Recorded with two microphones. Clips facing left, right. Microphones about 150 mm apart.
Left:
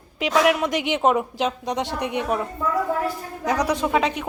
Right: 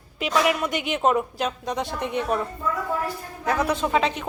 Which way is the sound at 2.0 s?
15° left (ahead or behind).